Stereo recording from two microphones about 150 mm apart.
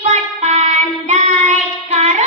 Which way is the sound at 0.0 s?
45° right (ahead or behind).